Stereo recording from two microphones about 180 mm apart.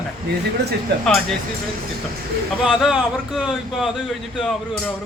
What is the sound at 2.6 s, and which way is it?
Speech, centre (ahead or behind).